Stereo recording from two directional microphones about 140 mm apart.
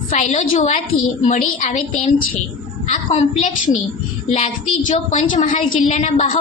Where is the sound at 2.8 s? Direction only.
55° left (ahead or behind).